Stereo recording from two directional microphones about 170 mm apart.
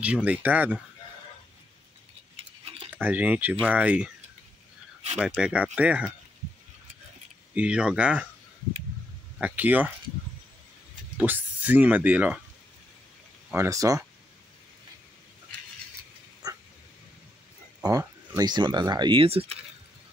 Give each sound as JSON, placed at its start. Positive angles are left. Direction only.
{"t": 0.0, "sound": "speech", "side_deg": -10}
{"t": 2.3, "sound": "tick-tock", "side_deg": -35}
{"t": 3.0, "sound": "speech", "side_deg": -10}
{"t": 5.1, "sound": "speech", "side_deg": -5}
{"t": 7.5, "sound": "speech", "side_deg": -5}
{"t": 9.4, "sound": "speech", "side_deg": -10}
{"t": 11.1, "sound": "speech", "side_deg": -10}
{"t": 13.5, "sound": "speech", "side_deg": -15}
{"t": 16.4, "sound": "dog", "side_deg": -20}
{"t": 17.8, "sound": "speech", "side_deg": -20}